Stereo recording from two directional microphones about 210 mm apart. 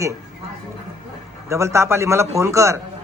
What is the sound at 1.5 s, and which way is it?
A man's voice, 15° right (ahead or behind).